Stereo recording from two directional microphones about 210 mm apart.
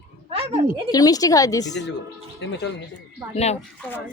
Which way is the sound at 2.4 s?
55° left (ahead or behind).